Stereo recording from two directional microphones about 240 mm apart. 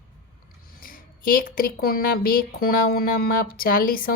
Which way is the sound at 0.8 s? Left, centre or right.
Left.